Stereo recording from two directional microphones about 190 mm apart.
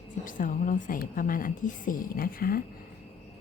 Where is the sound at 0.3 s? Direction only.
45° left (ahead or behind).